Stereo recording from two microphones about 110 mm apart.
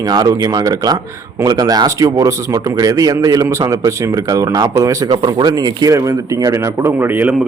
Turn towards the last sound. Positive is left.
turn(degrees=-15)  # may be behind; listen again after turning